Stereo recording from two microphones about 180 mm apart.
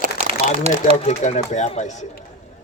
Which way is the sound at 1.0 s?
40° left (ahead or behind).